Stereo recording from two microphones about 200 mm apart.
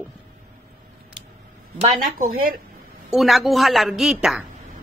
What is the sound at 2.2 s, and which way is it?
Speech, 50° right (ahead or behind).